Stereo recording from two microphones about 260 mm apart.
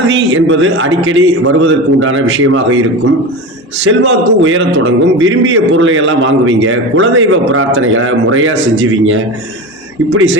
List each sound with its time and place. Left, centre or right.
0.1 s a man's voice: right
3.8 s a man's voice: right